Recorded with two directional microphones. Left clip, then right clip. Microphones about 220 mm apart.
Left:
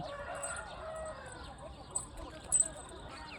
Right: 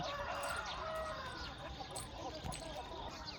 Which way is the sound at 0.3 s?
30° left (ahead or behind).